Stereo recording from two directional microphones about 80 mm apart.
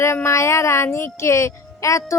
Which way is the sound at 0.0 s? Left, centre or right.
Left.